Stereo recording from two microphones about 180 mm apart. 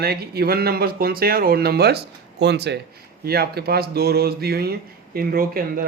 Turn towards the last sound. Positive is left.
turn(degrees=-55)  # may be behind; listen again after turning